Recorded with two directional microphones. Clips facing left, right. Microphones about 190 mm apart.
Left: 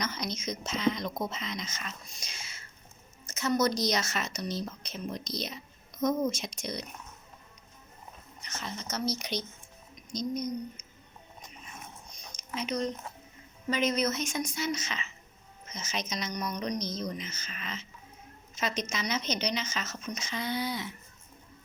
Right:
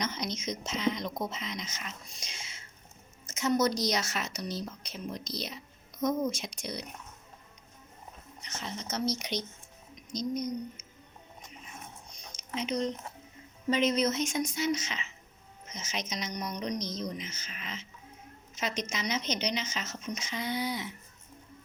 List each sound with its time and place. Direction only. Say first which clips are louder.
0.0 s speech: even; 20° right (ahead or behind)
6.3 s speech: left 1 dB; 10° right (ahead or behind)
8.4 s a woman's voice: even; 20° right (ahead or behind)
12.4 s a woman's voice: right 1 dB; 25° right (ahead or behind)